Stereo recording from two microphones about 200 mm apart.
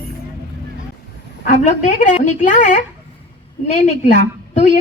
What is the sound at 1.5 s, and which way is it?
A woman's voice, 40° left (ahead or behind).